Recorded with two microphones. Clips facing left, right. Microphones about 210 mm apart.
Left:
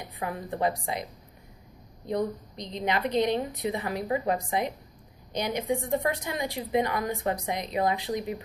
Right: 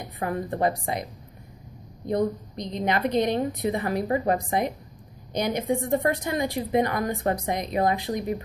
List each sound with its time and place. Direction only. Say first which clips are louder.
0.2 s a woman's voice: right 4 dB; 50° right (ahead or behind)
2.0 s a woman's voice: right 4 dB; 50° right (ahead or behind)